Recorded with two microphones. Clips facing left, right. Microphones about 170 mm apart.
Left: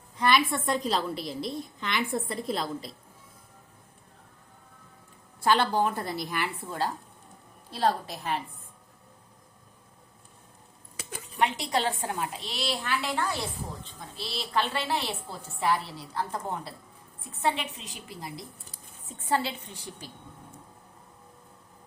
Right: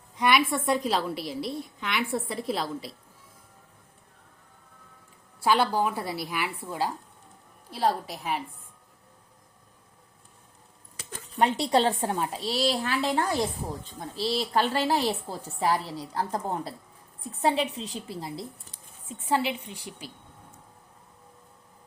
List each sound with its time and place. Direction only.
0.2 s a woman's voice: 10° right (ahead or behind)
5.4 s a woman's voice: 10° right (ahead or behind)
11.3 s a woman's voice: 35° right (ahead or behind)
19.5 s a woman's voice: 10° right (ahead or behind)